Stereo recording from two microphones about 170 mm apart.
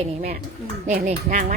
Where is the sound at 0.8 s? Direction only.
50° right (ahead or behind).